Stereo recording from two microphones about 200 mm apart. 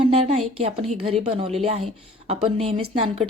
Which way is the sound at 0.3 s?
30° right (ahead or behind).